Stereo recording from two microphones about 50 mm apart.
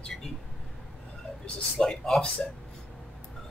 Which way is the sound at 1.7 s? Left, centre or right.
Centre.